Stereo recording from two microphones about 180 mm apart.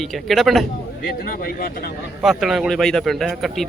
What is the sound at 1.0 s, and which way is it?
Speech, 55° left (ahead or behind).